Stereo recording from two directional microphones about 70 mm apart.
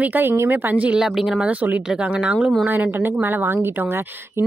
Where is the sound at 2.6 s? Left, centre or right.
Right.